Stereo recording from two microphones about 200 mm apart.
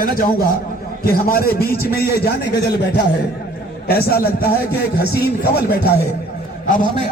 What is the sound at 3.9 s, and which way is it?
A man's voice, 50° left (ahead or behind).